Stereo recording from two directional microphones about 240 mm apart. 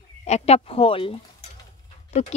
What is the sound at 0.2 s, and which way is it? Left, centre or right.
Speech, left.